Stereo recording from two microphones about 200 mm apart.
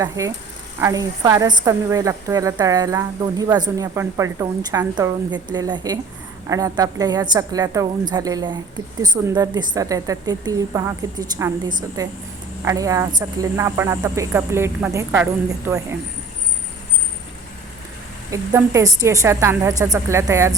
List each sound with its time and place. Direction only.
0.0 s a woman's voice: 15° right (ahead or behind)
18.3 s a woman's voice: 15° right (ahead or behind)